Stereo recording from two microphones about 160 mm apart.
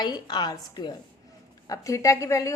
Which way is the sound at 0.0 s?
25° left (ahead or behind).